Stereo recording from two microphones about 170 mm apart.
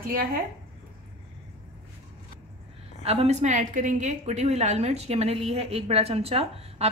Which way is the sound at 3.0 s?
35° right (ahead or behind).